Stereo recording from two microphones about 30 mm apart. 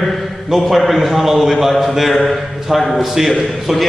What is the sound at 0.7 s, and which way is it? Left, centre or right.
A man's voice, centre.